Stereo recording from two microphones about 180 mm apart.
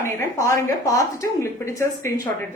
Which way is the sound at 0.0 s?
15° left (ahead or behind).